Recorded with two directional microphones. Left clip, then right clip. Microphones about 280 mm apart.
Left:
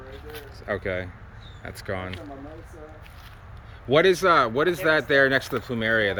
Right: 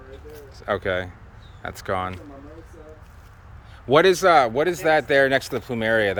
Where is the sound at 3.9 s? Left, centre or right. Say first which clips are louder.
Right 3 dB; centre.